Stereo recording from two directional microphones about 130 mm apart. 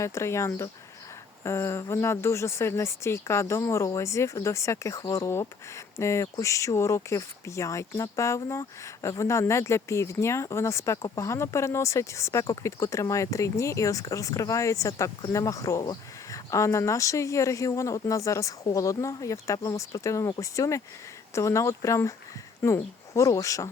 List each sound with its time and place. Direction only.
0.0 s speech: 20° left (ahead or behind)